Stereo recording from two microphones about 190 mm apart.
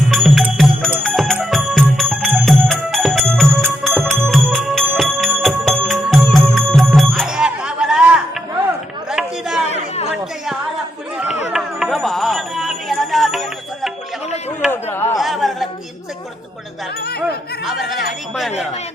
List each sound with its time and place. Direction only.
0.1 s music: centre (ahead or behind)
9.0 s chatter: centre (ahead or behind)
9.6 s chatter: 35° left (ahead or behind)
11.5 s music: centre (ahead or behind)
14.7 s chop: 10° left (ahead or behind)
15.2 s a sound: centre (ahead or behind)
17.0 s music: 55° left (ahead or behind)
17.2 s chatter: centre (ahead or behind)